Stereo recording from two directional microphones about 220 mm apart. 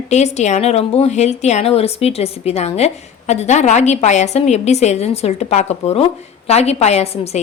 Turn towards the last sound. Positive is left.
turn(degrees=30)  # may be behind; listen again after turning